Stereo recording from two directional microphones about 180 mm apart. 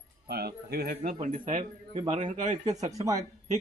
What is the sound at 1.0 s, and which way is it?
A man's voice, 45° right (ahead or behind).